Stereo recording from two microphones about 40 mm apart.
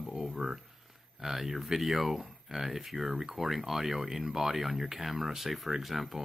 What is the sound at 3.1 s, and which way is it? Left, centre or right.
Speech, centre.